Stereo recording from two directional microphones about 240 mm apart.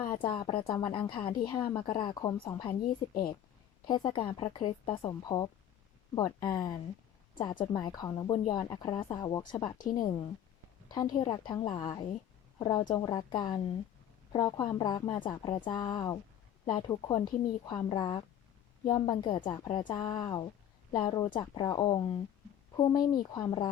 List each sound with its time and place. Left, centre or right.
0.0 s a woman's voice: centre
3.8 s a woman's voice: centre